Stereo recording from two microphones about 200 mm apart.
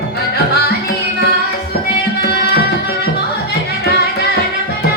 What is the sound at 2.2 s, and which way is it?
Music, 55° left (ahead or behind).